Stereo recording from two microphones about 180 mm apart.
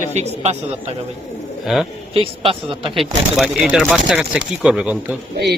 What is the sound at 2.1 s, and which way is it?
Speech, 30° right (ahead or behind).